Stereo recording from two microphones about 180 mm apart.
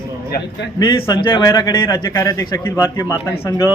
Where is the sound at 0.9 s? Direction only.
25° left (ahead or behind).